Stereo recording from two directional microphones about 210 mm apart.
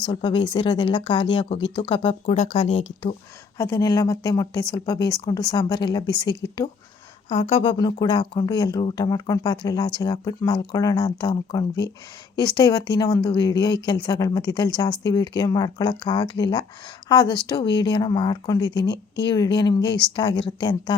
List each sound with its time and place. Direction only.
0.0 s speech: 20° left (ahead or behind)
3.6 s speech: 15° left (ahead or behind)